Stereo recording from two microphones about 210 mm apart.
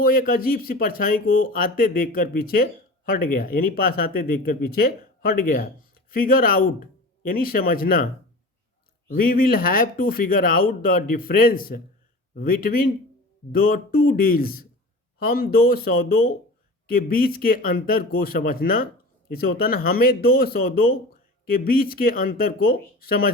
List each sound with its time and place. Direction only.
0.0 s speech: 45° left (ahead or behind)